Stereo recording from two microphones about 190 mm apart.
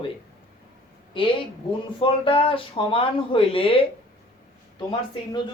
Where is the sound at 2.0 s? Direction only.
30° left (ahead or behind).